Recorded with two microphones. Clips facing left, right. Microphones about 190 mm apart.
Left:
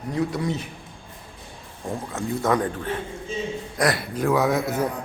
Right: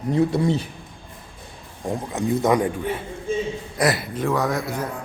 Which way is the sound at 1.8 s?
15° right (ahead or behind).